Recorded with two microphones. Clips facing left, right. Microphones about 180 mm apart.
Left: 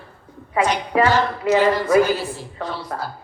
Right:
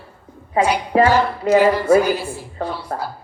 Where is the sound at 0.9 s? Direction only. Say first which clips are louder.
Right 3 dB; 30° right (ahead or behind).